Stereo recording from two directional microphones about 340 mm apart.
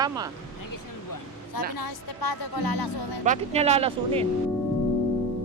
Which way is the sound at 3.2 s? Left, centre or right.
Centre.